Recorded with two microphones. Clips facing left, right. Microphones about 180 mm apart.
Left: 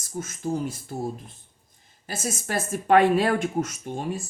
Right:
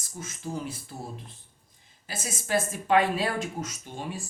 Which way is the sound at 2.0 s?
45° left (ahead or behind).